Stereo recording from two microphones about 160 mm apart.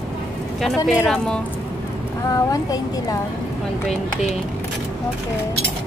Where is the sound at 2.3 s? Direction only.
20° left (ahead or behind).